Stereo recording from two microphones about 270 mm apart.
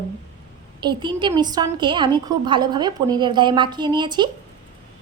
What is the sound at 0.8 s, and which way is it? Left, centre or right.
A woman's voice, centre.